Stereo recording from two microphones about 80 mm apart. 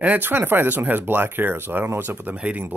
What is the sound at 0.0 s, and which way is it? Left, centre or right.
Speech, right.